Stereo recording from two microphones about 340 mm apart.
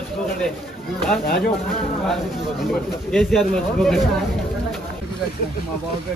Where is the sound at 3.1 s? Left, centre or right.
Centre.